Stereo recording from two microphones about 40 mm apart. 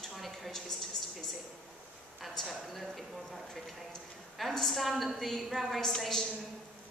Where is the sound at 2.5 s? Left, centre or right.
Centre.